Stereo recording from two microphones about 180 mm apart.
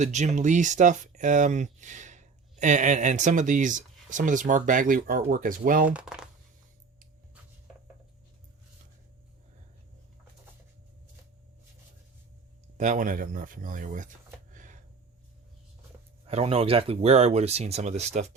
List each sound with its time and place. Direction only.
0.0 s speech: 40° right (ahead or behind)
5.9 s speech: 5° right (ahead or behind)
12.7 s speech: 45° right (ahead or behind)
14.5 s a sound: 45° right (ahead or behind)
16.2 s speech: 35° right (ahead or behind)